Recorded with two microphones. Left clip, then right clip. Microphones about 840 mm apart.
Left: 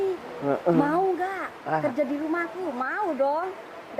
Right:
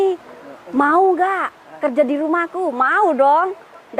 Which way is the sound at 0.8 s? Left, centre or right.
Right.